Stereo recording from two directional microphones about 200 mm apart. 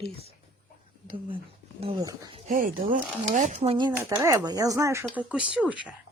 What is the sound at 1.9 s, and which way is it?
Speech, 20° right (ahead or behind).